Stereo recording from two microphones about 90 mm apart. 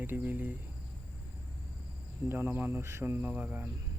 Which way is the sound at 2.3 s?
25° right (ahead or behind).